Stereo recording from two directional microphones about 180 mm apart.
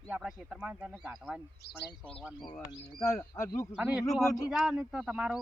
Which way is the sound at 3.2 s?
15° left (ahead or behind).